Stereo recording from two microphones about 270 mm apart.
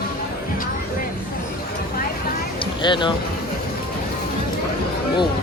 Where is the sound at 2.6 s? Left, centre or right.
Centre.